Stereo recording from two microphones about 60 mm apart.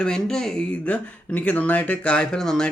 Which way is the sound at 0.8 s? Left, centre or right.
Left.